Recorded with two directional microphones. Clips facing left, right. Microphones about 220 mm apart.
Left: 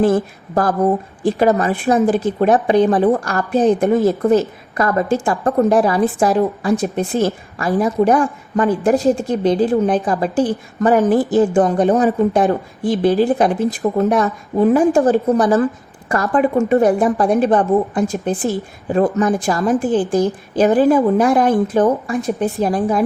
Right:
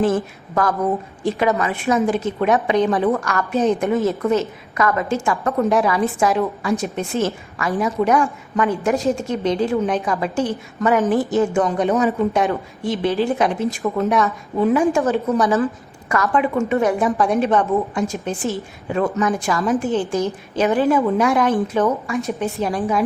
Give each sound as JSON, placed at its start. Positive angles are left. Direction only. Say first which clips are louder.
{"t": 0.0, "sound": "a woman's voice", "louder": "left 4 dB", "side_deg": 35}